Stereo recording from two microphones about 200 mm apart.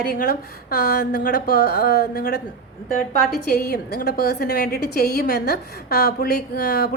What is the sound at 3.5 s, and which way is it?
A woman's voice, 50° left (ahead or behind).